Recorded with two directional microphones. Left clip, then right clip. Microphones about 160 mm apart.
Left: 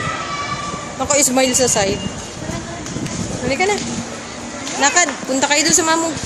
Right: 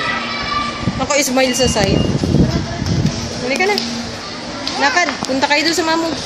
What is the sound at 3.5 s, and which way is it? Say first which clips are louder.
Speech: right 1 dB; 10° left (ahead or behind).